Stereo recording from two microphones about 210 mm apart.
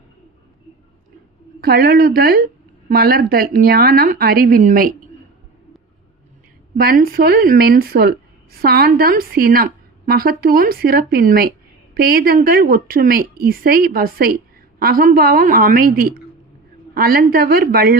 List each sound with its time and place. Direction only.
1.6 s a woman's voice: 50° right (ahead or behind)
6.7 s a woman's voice: 45° right (ahead or behind)